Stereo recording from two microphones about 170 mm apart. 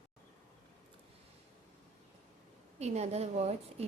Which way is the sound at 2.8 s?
40° right (ahead or behind).